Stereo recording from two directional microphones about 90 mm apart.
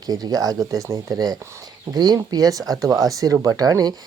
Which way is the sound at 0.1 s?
45° right (ahead or behind).